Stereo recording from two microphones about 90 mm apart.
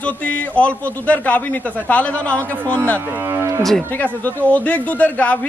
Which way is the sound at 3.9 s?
20° left (ahead or behind).